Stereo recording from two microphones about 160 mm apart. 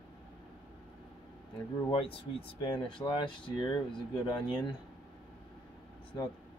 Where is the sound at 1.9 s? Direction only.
35° left (ahead or behind).